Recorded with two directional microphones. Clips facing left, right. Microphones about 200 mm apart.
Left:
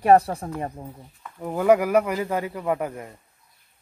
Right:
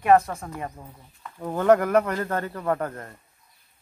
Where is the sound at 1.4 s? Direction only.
10° left (ahead or behind).